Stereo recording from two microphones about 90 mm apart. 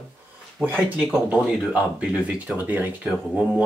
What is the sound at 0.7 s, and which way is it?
Speech, 15° right (ahead or behind).